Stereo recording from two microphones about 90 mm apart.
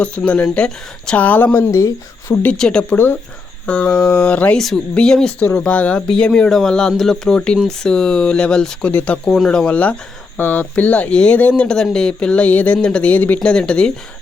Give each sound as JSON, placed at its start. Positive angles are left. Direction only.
{"t": 0.0, "sound": "speech", "side_deg": 15}
{"t": 1.7, "sound": "speech", "side_deg": 35}
{"t": 2.4, "sound": "speech", "side_deg": 10}
{"t": 9.2, "sound": "speech", "side_deg": 5}